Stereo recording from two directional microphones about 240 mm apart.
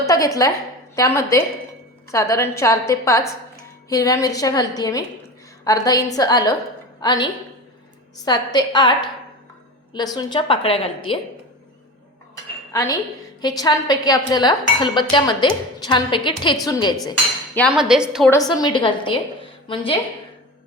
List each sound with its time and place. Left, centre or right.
0.0 s a woman's voice: centre
12.7 s speech: centre
17.7 s a woman's voice: centre
18.3 s a woman's voice: centre